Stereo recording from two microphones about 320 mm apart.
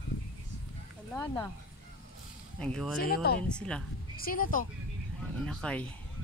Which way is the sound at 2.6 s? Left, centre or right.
Centre.